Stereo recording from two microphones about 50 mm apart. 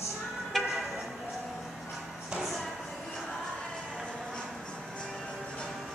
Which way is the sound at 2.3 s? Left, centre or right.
Centre.